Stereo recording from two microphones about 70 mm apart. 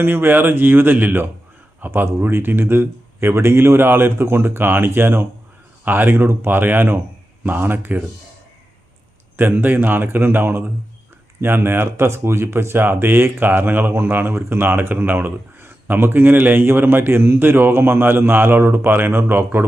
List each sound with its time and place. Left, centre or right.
0.0 s speech: right
9.4 s speech: right